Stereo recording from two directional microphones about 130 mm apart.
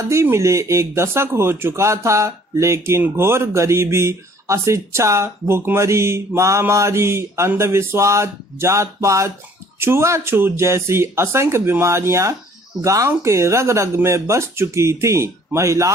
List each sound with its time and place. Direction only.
0.1 s speech: 20° right (ahead or behind)